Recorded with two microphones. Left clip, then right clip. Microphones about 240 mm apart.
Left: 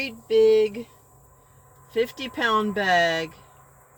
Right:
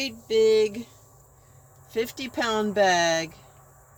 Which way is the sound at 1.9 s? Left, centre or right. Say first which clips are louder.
Left 3 dB; right.